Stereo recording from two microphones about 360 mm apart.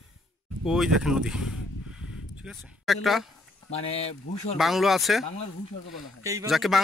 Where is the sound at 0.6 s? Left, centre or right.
Centre.